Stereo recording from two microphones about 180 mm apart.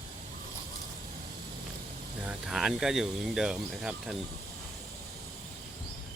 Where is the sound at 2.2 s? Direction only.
5° right (ahead or behind).